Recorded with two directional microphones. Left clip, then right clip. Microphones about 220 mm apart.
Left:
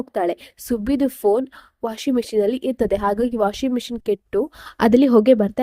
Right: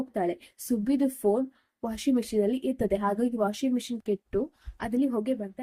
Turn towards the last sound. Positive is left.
turn(degrees=40)  # may be behind; listen again after turning